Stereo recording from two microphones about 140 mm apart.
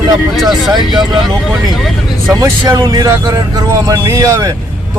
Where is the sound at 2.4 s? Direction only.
20° right (ahead or behind).